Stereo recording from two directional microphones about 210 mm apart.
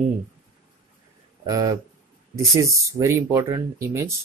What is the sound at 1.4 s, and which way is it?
Speech, 15° right (ahead or behind).